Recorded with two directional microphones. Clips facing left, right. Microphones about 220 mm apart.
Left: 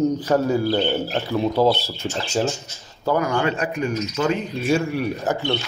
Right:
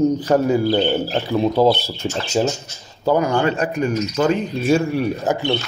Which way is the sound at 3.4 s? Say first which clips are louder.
Right 3 dB; 40° right (ahead or behind).